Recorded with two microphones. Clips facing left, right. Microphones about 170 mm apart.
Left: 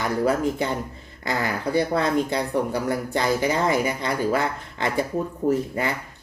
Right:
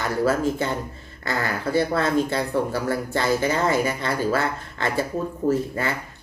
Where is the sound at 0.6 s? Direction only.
15° left (ahead or behind).